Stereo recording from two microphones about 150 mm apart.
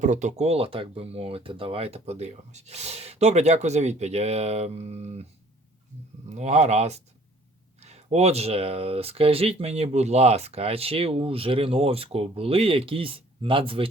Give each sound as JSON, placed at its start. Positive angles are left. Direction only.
{"t": 0.0, "sound": "speech", "side_deg": -55}
{"t": 6.3, "sound": "speech", "side_deg": -50}